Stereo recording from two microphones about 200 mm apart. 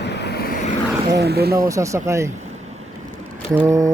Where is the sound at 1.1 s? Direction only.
55° right (ahead or behind).